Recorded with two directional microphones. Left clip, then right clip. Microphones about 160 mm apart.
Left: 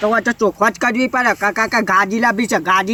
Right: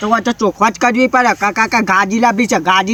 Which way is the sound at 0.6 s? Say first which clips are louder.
Right 5 dB; 60° right (ahead or behind).